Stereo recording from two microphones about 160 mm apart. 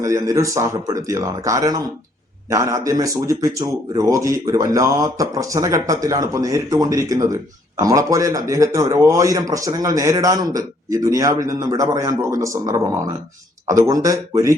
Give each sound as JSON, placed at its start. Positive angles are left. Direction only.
{"t": 0.0, "sound": "a man's voice", "side_deg": -20}